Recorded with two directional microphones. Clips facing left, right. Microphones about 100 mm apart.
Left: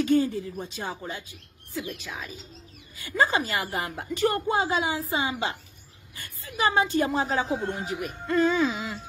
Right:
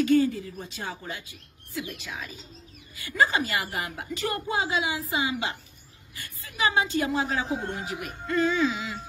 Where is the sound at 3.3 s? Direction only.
15° left (ahead or behind).